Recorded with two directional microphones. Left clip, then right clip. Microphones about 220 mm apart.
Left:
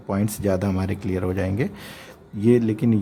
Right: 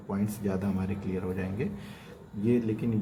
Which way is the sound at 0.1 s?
50° left (ahead or behind).